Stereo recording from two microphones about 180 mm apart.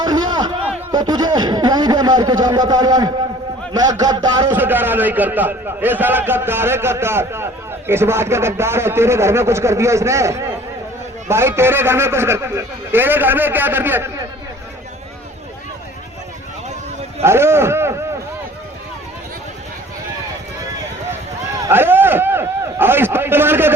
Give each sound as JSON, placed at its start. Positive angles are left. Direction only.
{"t": 0.0, "sound": "a sound", "side_deg": -25}
{"t": 0.9, "sound": "speech", "side_deg": -25}
{"t": 3.8, "sound": "a sound", "side_deg": -20}
{"t": 4.5, "sound": "a man's voice", "side_deg": -10}
{"t": 17.2, "sound": "a man's voice", "side_deg": -15}
{"t": 21.7, "sound": "a man's voice", "side_deg": -10}